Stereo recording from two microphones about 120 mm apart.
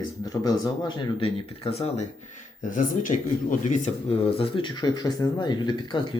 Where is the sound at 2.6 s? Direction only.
90° left.